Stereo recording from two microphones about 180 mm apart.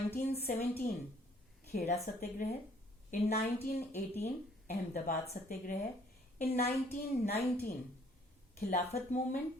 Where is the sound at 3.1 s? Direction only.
55° left (ahead or behind).